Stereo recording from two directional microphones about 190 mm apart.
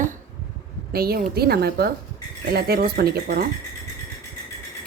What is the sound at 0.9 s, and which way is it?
A woman's voice, 55° right (ahead or behind).